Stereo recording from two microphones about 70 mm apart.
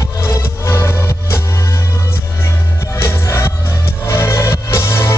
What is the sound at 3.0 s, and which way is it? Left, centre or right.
Music, left.